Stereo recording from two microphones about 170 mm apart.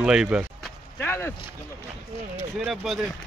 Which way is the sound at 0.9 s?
10° left (ahead or behind).